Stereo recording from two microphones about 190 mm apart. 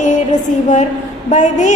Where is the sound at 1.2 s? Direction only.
40° left (ahead or behind).